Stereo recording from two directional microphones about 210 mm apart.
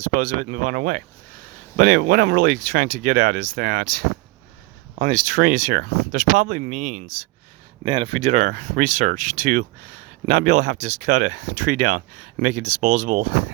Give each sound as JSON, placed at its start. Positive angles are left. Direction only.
{"t": 0.0, "sound": "speech", "side_deg": -40}
{"t": 7.9, "sound": "speech", "side_deg": -25}